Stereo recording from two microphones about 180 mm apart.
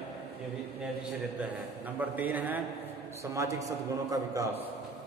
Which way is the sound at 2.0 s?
10° right (ahead or behind).